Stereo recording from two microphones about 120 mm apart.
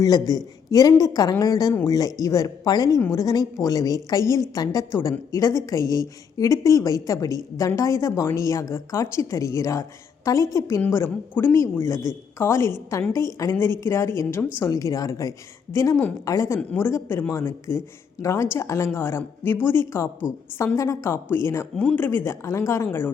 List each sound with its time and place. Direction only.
0.0 s a woman's voice: 30° left (ahead or behind)